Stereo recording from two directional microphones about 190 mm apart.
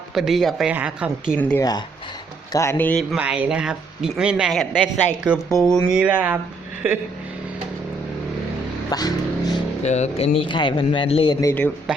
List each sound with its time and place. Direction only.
0.1 s speech: centre (ahead or behind)
1.4 s speech: 10° left (ahead or behind)
3.2 s speech: 5° right (ahead or behind)
8.9 s a sound: 20° left (ahead or behind)
9.8 s speech: 35° left (ahead or behind)
11.3 s speech: 15° left (ahead or behind)